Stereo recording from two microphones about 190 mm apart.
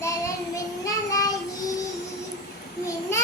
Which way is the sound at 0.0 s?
15° left (ahead or behind).